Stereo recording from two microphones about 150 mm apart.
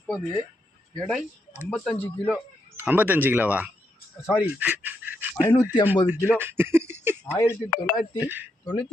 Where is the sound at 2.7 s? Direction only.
10° right (ahead or behind).